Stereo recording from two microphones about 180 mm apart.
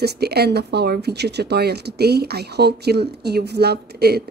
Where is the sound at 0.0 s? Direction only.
65° right (ahead or behind).